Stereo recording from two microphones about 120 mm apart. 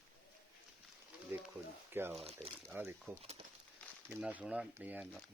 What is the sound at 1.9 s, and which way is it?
Speech, 20° right (ahead or behind).